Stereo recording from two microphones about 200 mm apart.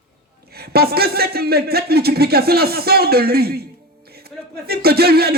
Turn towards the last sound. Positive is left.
turn(degrees=-50)  # may be behind; listen again after turning